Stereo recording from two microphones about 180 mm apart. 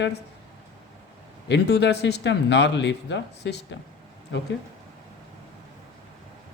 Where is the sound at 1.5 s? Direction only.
75° left (ahead or behind).